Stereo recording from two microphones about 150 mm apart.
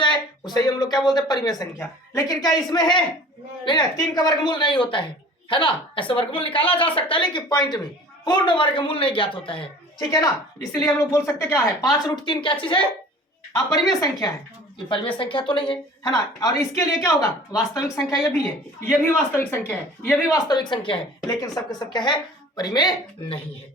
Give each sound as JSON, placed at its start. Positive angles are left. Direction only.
{"t": 0.0, "sound": "speech", "side_deg": 30}
{"t": 13.7, "sound": "speech", "side_deg": 25}
{"t": 14.8, "sound": "speech", "side_deg": 35}
{"t": 20.3, "sound": "speech", "side_deg": 30}